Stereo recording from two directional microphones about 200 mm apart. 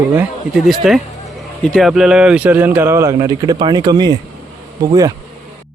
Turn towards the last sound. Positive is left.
turn(degrees=-20)  # may be behind; listen again after turning